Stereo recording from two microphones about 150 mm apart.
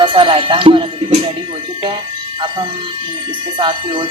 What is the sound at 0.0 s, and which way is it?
Speech, 35° right (ahead or behind).